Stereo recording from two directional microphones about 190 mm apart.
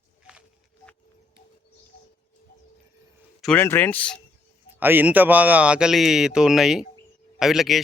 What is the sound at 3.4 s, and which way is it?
Speech, 5° left (ahead or behind).